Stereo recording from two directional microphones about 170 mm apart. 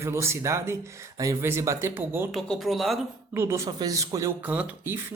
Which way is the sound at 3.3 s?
15° right (ahead or behind).